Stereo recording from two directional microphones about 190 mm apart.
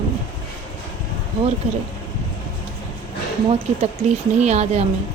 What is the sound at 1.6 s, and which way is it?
Speech, 35° right (ahead or behind).